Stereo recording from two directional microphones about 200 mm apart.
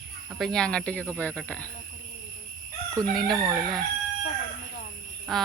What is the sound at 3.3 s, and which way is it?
Chicken, 15° right (ahead or behind).